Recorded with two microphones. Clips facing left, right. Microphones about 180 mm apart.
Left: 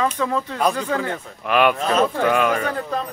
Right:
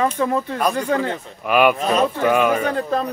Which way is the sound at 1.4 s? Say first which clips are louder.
Right 2 dB; 5° right (ahead or behind).